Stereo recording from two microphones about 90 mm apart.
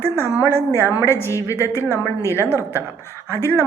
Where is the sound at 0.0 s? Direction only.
25° left (ahead or behind).